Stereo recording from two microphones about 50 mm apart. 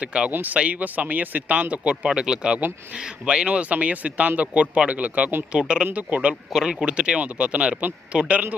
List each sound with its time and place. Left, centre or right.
0.0 s speech: right
0.3 s speech: right
2.0 s speech: centre; by 5.3 s right
5.5 s speech: centre
6.5 s speech: centre